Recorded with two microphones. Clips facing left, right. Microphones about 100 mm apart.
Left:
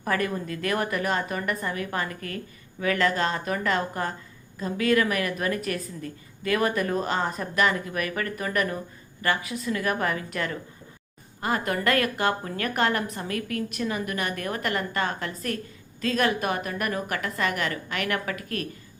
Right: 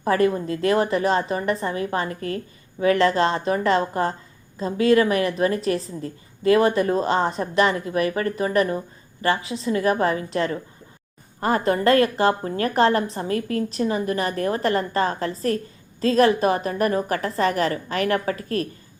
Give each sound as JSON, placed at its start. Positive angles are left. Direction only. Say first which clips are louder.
{"t": 0.0, "sound": "a woman's voice", "louder": "right 7 dB", "side_deg": -30}